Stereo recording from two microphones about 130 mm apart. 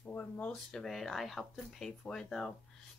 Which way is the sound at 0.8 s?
Centre (ahead or behind).